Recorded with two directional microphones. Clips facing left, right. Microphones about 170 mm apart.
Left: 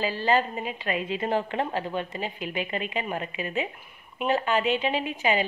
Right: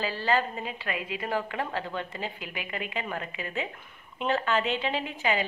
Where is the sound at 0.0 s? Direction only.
20° left (ahead or behind).